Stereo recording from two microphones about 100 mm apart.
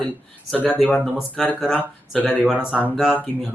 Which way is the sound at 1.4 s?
Centre (ahead or behind).